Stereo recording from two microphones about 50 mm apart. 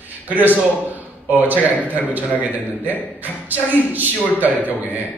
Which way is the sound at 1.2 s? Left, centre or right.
Right.